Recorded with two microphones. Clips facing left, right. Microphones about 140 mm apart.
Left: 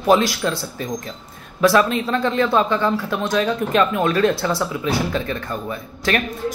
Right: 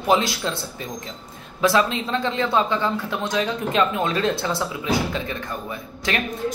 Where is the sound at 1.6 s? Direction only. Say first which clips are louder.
Left 4 dB; 20° right (ahead or behind).